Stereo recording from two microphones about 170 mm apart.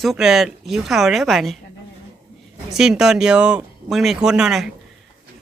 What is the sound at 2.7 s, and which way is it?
Speech, 5° right (ahead or behind).